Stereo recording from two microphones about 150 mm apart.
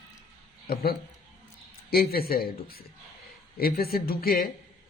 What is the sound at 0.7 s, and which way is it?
Speech, 90° left.